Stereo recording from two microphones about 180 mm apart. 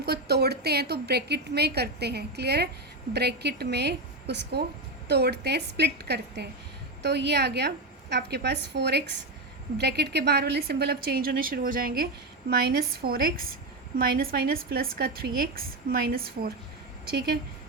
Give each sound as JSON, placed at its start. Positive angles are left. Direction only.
{"t": 0.0, "sound": "a woman's voice", "side_deg": -65}